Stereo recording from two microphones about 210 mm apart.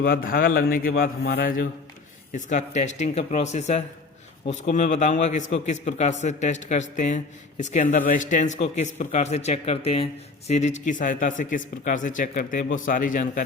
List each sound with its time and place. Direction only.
0.0 s a man's voice: 45° left (ahead or behind)